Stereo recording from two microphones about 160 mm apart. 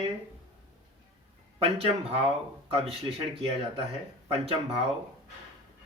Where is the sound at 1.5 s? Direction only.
40° right (ahead or behind).